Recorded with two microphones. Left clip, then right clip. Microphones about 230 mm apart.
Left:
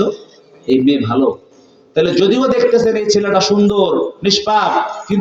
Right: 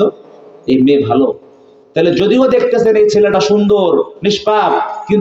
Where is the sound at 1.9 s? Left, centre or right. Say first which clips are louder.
Right 1 dB; right.